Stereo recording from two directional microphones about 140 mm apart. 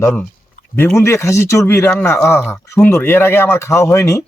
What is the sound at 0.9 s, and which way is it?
Speech, 20° left (ahead or behind).